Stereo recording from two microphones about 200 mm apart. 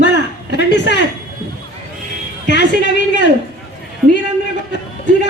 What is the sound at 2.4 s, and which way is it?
Speech, 60° left (ahead or behind).